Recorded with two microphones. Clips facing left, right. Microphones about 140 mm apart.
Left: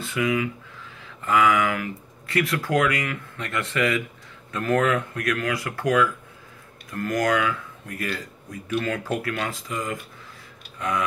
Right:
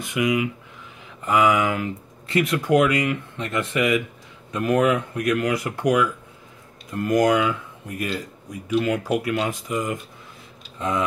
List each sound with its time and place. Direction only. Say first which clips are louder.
0.0 s speech: right 2 dB; 15° right (ahead or behind)